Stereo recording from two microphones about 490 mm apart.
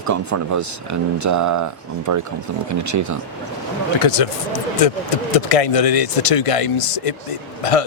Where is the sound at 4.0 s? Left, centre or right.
Left.